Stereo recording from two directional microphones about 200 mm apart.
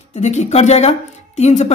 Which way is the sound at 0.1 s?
35° left (ahead or behind).